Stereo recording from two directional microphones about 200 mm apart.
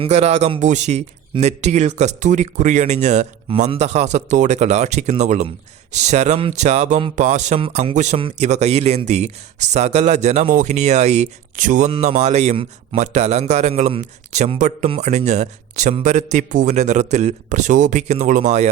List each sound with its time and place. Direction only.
0.0 s a man's voice: 30° right (ahead or behind)